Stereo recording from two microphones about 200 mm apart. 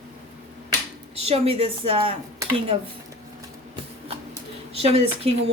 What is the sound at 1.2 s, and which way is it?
Speech, 30° right (ahead or behind).